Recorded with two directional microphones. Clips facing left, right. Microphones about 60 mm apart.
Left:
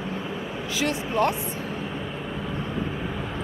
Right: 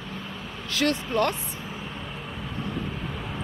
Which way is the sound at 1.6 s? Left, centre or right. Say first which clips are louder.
Left 5 dB; centre.